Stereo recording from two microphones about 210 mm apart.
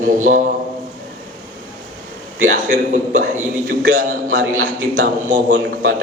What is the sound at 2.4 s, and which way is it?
A man's voice, 40° right (ahead or behind).